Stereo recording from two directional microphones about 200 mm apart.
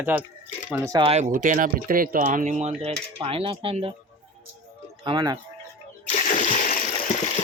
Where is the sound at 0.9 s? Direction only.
30° right (ahead or behind).